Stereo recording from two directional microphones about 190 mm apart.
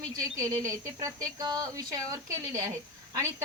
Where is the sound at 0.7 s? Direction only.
20° right (ahead or behind).